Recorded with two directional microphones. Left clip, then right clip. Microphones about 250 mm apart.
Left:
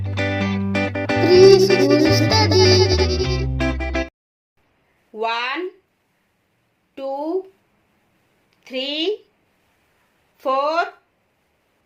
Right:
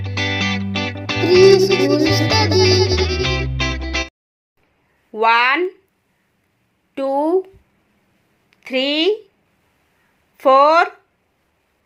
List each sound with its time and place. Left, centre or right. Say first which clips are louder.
0.0 s music: right 3 dB; centre
5.1 s speech: right 9 dB; right
6.9 s speech: right 7 dB; right
8.6 s speech: right 6 dB; right
10.3 s speech: right 8 dB; right